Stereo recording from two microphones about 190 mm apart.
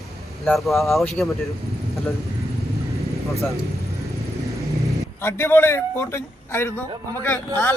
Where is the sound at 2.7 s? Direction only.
15° right (ahead or behind).